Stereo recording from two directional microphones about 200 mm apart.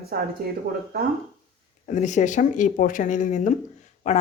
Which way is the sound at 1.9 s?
40° left (ahead or behind).